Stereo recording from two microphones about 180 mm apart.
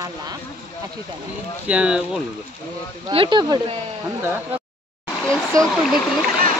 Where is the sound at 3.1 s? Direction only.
25° right (ahead or behind).